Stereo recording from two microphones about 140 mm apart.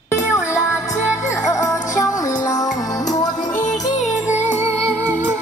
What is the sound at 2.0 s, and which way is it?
Music, 25° left (ahead or behind).